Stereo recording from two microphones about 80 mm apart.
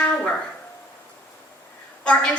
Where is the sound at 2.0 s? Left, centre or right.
Centre.